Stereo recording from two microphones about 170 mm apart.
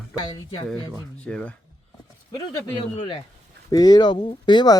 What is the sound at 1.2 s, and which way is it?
Speech, 5° left (ahead or behind).